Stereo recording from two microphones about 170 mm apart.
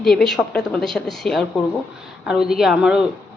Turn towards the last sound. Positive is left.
turn(degrees=-5)  # may be behind; listen again after turning